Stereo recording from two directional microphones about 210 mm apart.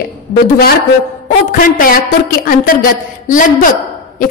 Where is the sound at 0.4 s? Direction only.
45° left (ahead or behind).